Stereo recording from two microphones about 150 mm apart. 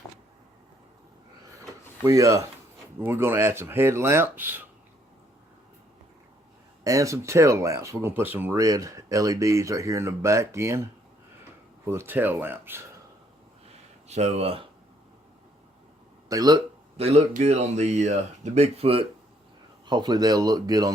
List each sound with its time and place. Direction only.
2.0 s speech: 20° right (ahead or behind)
6.8 s speech: 20° right (ahead or behind)
11.9 s speech: 15° right (ahead or behind)
14.1 s speech: 45° right (ahead or behind)
16.3 s speech: 25° right (ahead or behind)
17.0 s speech: 45° right (ahead or behind)
19.9 s speech: 30° right (ahead or behind)